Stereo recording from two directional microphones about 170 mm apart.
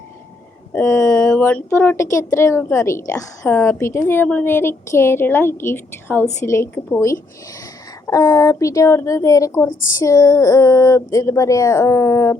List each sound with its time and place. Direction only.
0.7 s a woman's voice: 15° left (ahead or behind)